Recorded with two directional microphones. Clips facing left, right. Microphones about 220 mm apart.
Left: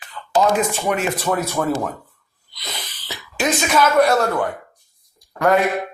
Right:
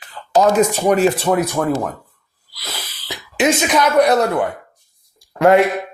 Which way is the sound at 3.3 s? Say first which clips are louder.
Right 3 dB; 20° right (ahead or behind).